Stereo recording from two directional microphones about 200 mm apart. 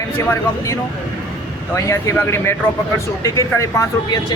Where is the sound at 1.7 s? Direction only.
15° left (ahead or behind).